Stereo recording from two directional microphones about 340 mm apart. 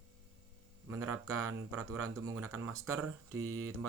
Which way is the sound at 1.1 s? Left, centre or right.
Right.